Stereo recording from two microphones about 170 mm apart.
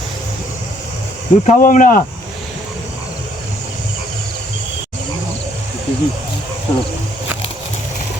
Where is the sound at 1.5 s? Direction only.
50° left (ahead or behind).